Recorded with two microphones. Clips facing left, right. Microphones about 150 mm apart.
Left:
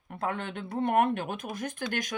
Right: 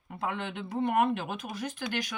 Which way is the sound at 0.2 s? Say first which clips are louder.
Left 1 dB; 50° left (ahead or behind).